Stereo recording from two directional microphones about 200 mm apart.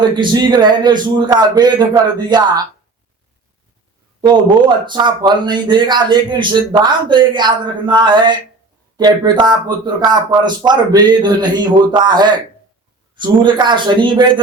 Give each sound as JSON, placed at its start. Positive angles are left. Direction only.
{"t": 0.2, "sound": "speech", "side_deg": -20}
{"t": 4.9, "sound": "speech", "side_deg": -20}